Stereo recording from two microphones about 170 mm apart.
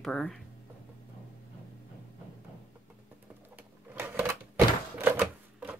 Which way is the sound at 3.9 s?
15° right (ahead or behind).